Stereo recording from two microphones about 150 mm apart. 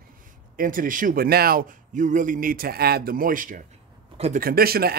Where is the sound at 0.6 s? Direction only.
65° right (ahead or behind).